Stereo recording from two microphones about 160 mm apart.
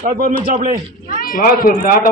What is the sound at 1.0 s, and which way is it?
Speech, 60° left (ahead or behind).